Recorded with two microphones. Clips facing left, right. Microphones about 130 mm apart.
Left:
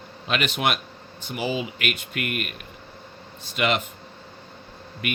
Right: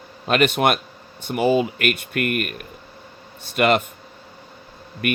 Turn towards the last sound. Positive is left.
turn(degrees=-50)  # may be behind; listen again after turning